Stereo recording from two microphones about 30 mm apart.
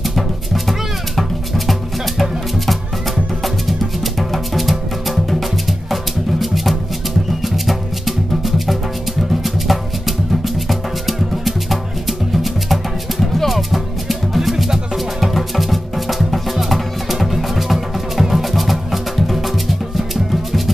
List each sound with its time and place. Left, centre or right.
1.7 s music: centre
4.3 s music: centre
6.4 s music: centre
13.5 s music: centre
15.3 s music: centre